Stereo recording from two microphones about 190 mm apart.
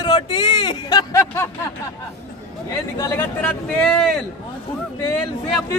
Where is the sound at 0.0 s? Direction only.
25° left (ahead or behind).